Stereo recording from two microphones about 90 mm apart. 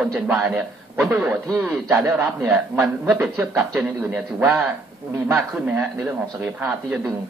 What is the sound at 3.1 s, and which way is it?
A man's voice, 20° right (ahead or behind).